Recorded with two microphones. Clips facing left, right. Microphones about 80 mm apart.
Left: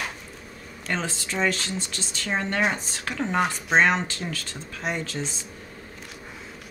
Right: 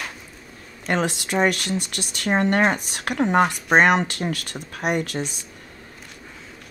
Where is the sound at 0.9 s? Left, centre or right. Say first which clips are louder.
Right 7 dB; right.